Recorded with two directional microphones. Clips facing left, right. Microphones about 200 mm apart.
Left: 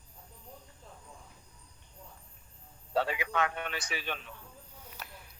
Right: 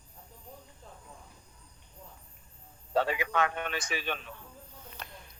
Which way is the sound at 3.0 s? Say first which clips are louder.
Right 2 dB; 45° right (ahead or behind).